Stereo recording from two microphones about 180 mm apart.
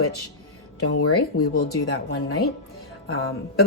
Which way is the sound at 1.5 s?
65° left (ahead or behind).